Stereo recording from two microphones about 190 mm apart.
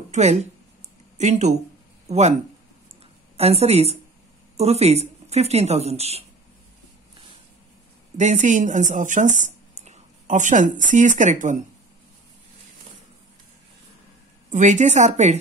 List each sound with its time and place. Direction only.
0.1 s speech: 35° right (ahead or behind)
3.3 s speech: 30° right (ahead or behind)
8.2 s speech: 40° right (ahead or behind)
14.5 s speech: 40° right (ahead or behind)